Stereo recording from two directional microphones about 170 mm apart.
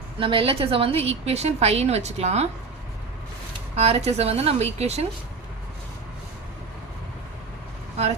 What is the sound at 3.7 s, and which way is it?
Speech, 35° right (ahead or behind).